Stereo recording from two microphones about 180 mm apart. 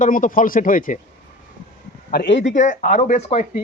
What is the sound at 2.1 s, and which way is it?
Speech, 75° left (ahead or behind).